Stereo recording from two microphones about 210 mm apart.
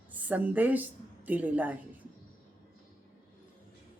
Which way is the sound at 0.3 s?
5° right (ahead or behind).